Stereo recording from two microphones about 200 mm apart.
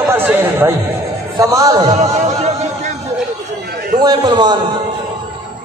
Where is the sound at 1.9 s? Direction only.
35° right (ahead or behind).